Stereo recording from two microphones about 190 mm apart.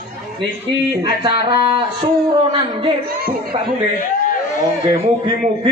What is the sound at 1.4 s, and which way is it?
Speech, 25° right (ahead or behind).